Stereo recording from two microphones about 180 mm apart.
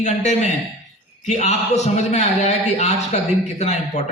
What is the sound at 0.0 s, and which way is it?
A man's voice, 40° left (ahead or behind).